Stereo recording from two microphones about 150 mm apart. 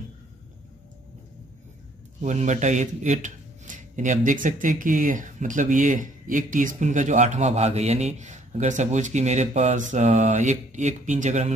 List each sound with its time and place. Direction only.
2.2 s speech: 50° right (ahead or behind)